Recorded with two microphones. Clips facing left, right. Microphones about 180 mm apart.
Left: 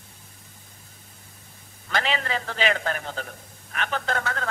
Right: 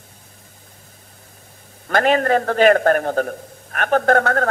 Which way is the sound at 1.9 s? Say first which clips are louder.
Right 11 dB; 50° right (ahead or behind).